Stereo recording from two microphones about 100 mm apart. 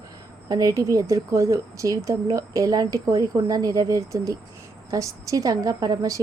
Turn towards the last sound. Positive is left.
turn(degrees=-35)  # may be behind; listen again after turning